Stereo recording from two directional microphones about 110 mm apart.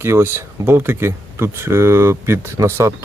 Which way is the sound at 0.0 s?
20° right (ahead or behind).